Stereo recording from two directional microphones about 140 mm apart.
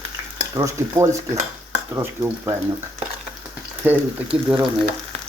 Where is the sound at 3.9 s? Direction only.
10° right (ahead or behind).